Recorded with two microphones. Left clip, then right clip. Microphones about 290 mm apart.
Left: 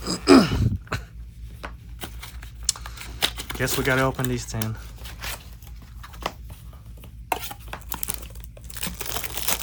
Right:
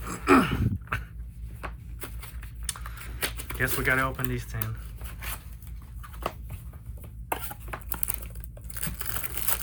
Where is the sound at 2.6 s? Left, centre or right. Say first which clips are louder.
Left 9 dB; centre.